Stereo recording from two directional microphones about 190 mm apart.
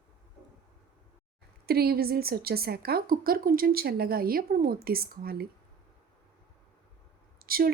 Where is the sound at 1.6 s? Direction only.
55° right (ahead or behind).